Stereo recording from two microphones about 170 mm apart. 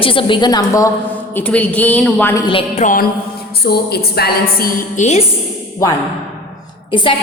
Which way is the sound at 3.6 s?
70° left (ahead or behind).